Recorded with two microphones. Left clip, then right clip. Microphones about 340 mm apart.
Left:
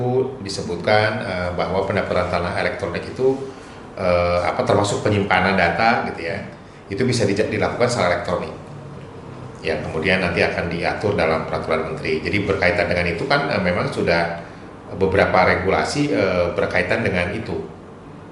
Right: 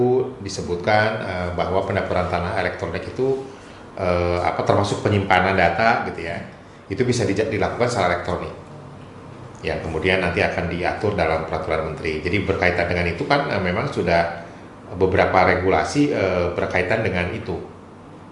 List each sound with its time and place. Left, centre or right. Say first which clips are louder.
0.4 s a man's voice: left 1 dB; right
9.6 s a man's voice: left 1 dB; right